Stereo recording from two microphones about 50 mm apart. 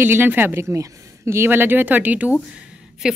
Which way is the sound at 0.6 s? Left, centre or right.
Right.